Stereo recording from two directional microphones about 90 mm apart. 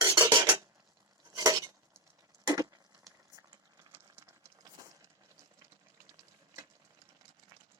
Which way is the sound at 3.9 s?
30° right (ahead or behind).